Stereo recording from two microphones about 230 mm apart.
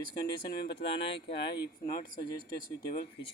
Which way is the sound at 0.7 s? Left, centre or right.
Left.